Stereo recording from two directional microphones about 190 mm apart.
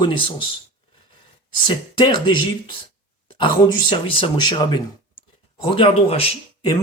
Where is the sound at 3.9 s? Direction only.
30° left (ahead or behind).